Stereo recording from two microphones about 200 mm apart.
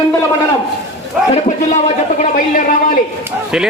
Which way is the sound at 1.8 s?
35° left (ahead or behind).